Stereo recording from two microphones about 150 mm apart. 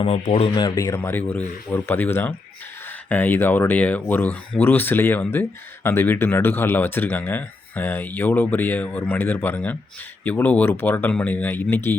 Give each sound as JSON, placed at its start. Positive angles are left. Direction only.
{"t": 0.3, "sound": "speech", "side_deg": 40}
{"t": 0.6, "sound": "speech", "side_deg": 20}